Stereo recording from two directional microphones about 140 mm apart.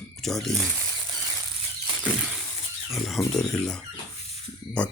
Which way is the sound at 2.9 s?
Centre (ahead or behind).